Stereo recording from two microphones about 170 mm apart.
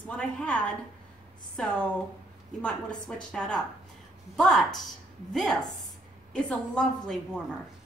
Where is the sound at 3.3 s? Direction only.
5° left (ahead or behind).